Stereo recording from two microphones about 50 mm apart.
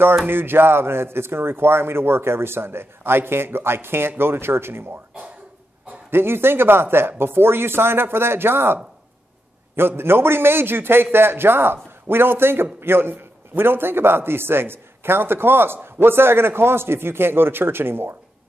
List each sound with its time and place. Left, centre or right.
0.3 s a man's voice: right
6.0 s a man's voice: right
9.8 s a man's voice: right